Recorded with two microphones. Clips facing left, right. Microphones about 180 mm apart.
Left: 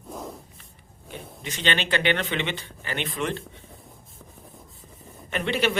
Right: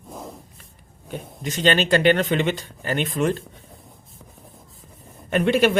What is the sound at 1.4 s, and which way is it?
A man's voice, 40° right (ahead or behind).